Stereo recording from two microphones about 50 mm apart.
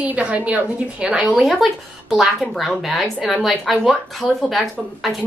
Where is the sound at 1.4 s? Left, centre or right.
Centre.